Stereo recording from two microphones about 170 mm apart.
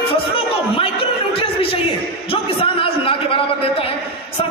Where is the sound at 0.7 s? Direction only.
35° left (ahead or behind).